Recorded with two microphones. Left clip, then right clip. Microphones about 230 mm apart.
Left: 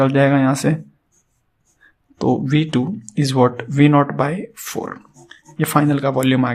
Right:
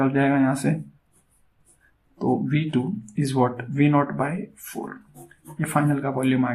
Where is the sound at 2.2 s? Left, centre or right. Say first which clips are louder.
Left 6 dB; left.